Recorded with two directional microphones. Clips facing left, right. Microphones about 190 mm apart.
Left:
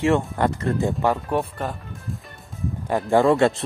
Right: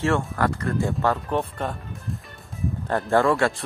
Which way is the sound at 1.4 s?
Centre (ahead or behind).